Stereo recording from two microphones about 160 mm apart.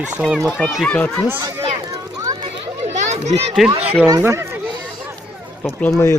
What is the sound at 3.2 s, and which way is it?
Speech, 45° right (ahead or behind).